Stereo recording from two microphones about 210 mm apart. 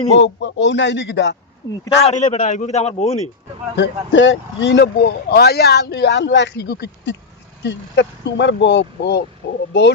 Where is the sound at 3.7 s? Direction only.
60° left (ahead or behind).